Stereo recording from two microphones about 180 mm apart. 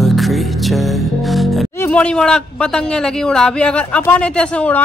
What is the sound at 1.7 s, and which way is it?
Speech, 10° left (ahead or behind).